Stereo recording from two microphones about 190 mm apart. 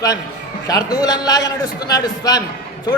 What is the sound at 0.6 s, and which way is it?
A man's voice, 20° left (ahead or behind).